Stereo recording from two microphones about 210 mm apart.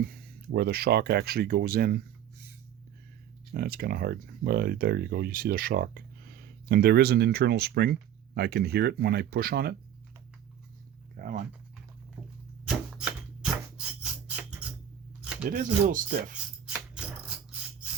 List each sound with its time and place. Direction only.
0.1 s speech: 50° right (ahead or behind)
3.5 s speech: 45° right (ahead or behind)
11.2 s dog: 40° right (ahead or behind)
12.6 s a sound: 5° right (ahead or behind)
15.2 s a sound: 5° right (ahead or behind)
15.4 s speech: 40° right (ahead or behind)